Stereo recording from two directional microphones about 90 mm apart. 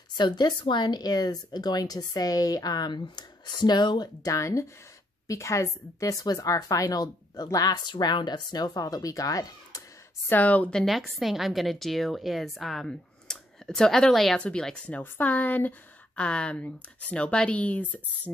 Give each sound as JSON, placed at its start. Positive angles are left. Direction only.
{"t": 0.2, "sound": "speech", "side_deg": 55}
{"t": 10.3, "sound": "a woman's voice", "side_deg": 15}